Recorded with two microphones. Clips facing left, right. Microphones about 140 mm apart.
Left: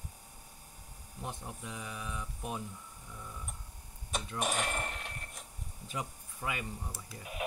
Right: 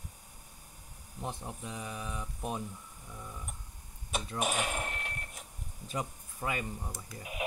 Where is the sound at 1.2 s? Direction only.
30° right (ahead or behind).